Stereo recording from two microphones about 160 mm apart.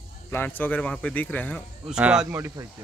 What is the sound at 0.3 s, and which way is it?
Speech, 10° left (ahead or behind).